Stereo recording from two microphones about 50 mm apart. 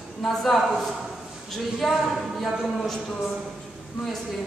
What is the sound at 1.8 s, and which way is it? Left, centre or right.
Speech, centre.